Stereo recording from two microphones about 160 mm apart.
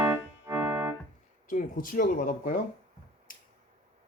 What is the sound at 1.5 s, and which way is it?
Speech, 60° left (ahead or behind).